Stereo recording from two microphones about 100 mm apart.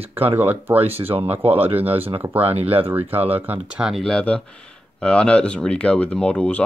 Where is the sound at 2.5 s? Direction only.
80° right.